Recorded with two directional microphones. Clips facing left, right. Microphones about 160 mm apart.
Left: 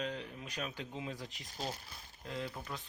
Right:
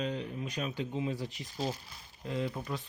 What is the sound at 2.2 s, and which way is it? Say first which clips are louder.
Speech: right 7 dB; 10° right (ahead or behind).